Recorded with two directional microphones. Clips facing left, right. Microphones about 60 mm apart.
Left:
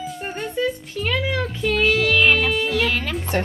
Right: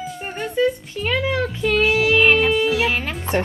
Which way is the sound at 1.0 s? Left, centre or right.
Right.